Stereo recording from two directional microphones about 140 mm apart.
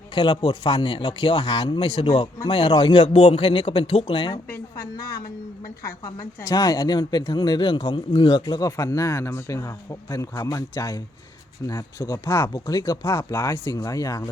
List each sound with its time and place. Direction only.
0.1 s a man's voice: 35° left (ahead or behind)
4.4 s a woman's voice: 15° left (ahead or behind)